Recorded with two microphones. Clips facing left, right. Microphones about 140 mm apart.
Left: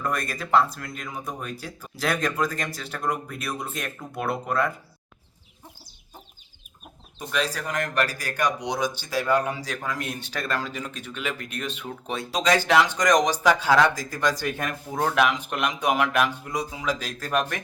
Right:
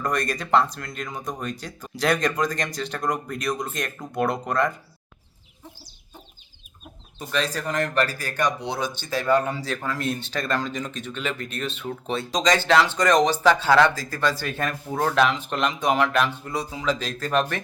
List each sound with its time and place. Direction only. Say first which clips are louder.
0.0 s speech: right 3 dB; 5° left (ahead or behind)
7.2 s a man's voice: right 1 dB; 10° left (ahead or behind)